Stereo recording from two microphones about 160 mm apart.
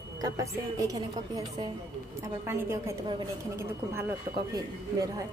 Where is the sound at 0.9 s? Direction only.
20° right (ahead or behind).